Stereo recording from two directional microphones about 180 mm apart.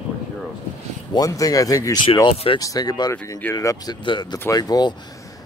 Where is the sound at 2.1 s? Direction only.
30° left (ahead or behind).